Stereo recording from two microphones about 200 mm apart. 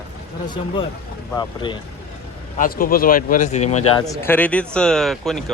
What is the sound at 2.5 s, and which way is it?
Speech, 45° left (ahead or behind).